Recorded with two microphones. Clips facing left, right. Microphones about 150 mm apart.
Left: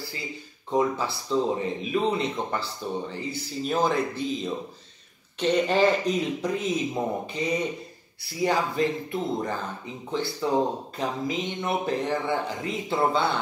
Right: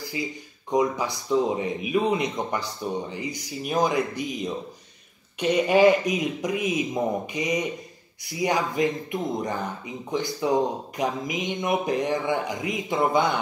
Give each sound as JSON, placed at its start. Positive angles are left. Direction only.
{"t": 0.7, "sound": "speech", "side_deg": -15}